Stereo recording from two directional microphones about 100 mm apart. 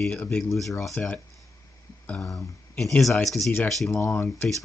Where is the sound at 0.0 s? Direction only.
10° left (ahead or behind).